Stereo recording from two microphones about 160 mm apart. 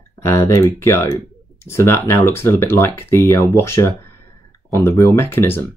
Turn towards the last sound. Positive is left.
turn(degrees=15)  # may be behind; listen again after turning